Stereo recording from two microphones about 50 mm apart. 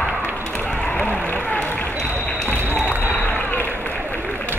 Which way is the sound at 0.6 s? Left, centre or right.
Left.